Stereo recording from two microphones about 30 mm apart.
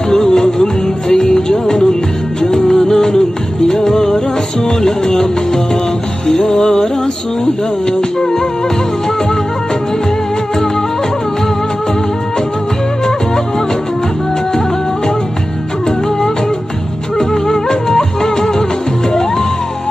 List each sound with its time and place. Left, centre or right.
0.1 s music: centre
2.4 s music of bollywood: centre
3.9 s music: left
7.9 s music: left
17.2 s music: left